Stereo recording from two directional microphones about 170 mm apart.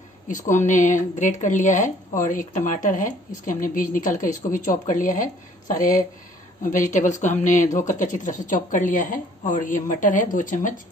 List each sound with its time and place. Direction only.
0.3 s speech: 50° left (ahead or behind)